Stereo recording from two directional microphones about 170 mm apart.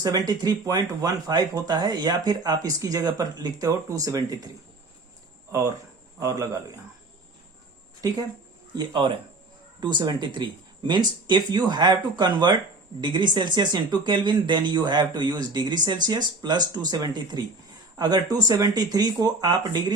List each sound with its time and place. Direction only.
0.0 s speech: 20° right (ahead or behind)
5.5 s speech: 20° right (ahead or behind)
8.8 s speech: 25° right (ahead or behind)